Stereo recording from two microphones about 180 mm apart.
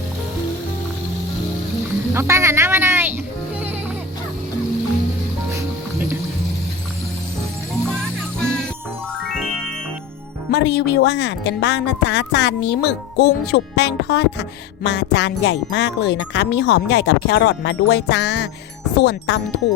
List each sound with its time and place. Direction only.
2.1 s a woman's voice: 15° right (ahead or behind)
8.4 s music: 5° left (ahead or behind)
10.5 s a woman's voice: 70° left (ahead or behind)